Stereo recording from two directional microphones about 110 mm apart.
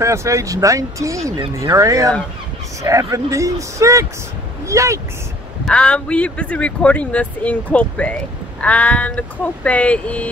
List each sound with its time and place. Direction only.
0.0 s speech: 25° right (ahead or behind)
5.7 s speech: 10° left (ahead or behind)